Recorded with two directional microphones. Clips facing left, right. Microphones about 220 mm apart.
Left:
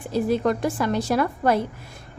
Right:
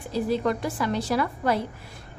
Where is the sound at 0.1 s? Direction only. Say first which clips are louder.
Left 3 dB; 50° left (ahead or behind).